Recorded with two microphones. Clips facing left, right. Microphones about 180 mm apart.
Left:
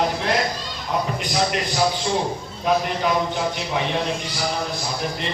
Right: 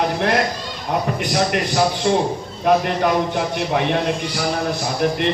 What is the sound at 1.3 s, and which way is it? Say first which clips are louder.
Speech: right 4 dB; 60° right (ahead or behind).